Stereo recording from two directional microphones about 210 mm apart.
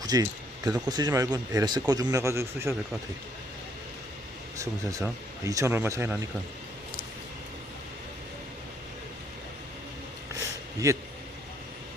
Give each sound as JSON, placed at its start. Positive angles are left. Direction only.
{"t": 0.0, "sound": "a sound", "side_deg": -20}
{"t": 0.9, "sound": "a man's voice", "side_deg": -20}
{"t": 4.6, "sound": "a man's voice", "side_deg": -15}
{"t": 10.8, "sound": "a man's voice", "side_deg": -15}